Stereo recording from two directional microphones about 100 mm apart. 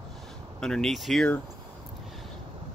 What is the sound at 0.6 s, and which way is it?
Speech, 5° left (ahead or behind).